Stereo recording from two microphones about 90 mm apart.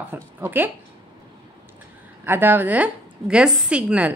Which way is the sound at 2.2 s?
25° right (ahead or behind).